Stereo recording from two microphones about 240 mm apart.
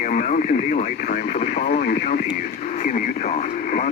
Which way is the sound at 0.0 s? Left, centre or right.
Left.